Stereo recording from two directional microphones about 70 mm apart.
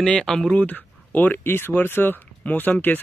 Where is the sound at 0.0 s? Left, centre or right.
Centre.